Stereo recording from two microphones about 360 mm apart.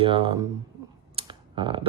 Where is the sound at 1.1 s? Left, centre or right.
Centre.